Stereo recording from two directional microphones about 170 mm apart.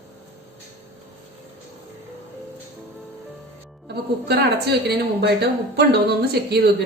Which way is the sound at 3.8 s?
70° right (ahead or behind).